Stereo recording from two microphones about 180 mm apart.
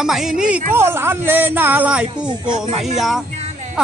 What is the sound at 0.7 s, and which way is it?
Speech, 15° right (ahead or behind).